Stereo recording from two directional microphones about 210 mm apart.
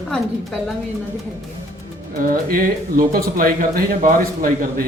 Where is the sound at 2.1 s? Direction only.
45° right (ahead or behind).